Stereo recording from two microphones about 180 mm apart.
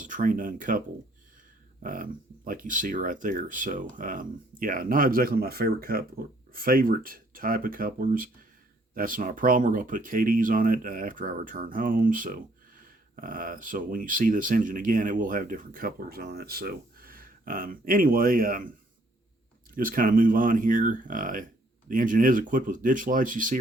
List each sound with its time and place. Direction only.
0.0 s speech: 45° right (ahead or behind)
1.8 s speech: 50° right (ahead or behind)
19.7 s speech: 50° right (ahead or behind)